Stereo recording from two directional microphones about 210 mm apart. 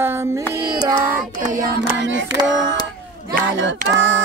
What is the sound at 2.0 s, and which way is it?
Female singing, 60° right (ahead or behind).